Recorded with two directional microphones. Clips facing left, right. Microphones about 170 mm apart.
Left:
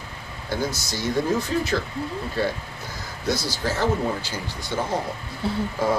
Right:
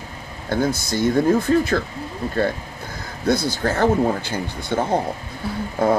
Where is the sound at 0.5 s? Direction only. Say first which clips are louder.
Right 6 dB; 55° right (ahead or behind).